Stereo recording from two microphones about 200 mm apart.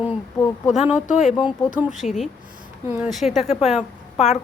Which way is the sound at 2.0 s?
35° left (ahead or behind).